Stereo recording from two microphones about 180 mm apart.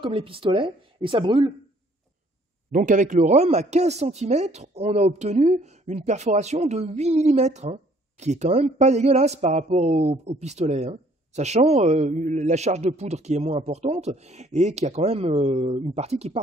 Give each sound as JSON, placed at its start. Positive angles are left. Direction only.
{"t": 0.0, "sound": "speech", "side_deg": -30}
{"t": 2.7, "sound": "speech", "side_deg": -45}